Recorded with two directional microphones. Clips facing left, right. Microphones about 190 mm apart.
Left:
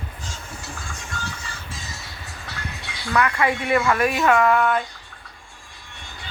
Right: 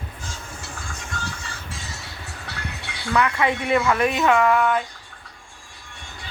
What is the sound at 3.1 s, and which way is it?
Speech, 5° right (ahead or behind).